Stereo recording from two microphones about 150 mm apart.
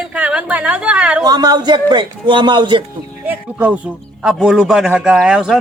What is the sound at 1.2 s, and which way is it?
A man's voice, 25° right (ahead or behind).